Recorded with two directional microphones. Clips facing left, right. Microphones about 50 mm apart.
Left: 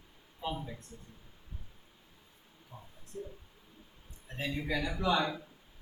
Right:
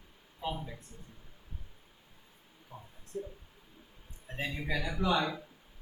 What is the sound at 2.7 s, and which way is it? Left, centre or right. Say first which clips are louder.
Speech: right 2 dB; right.